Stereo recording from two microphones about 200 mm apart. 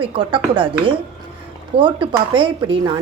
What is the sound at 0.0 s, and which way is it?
Speech, 25° right (ahead or behind).